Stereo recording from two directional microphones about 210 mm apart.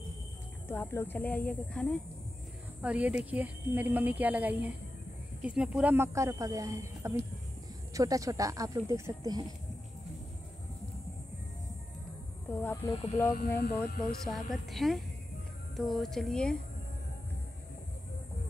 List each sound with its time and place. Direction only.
0.7 s speech: 10° left (ahead or behind)
2.8 s speech: 5° right (ahead or behind)
12.6 s speech: 10° left (ahead or behind)
13.3 s speech: 45° left (ahead or behind)
14.2 s a woman's voice: centre (ahead or behind)